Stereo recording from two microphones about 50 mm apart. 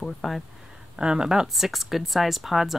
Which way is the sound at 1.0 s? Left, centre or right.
Centre.